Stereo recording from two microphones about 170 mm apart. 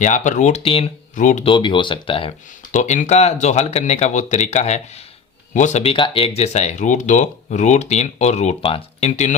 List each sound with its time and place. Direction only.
0.0 s speech: 45° left (ahead or behind)
1.1 s speech: 50° left (ahead or behind)
1.5 s speech: 30° left (ahead or behind)
2.7 s speech: 45° left (ahead or behind)